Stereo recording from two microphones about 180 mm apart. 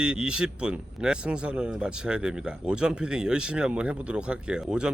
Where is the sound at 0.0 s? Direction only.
5° right (ahead or behind).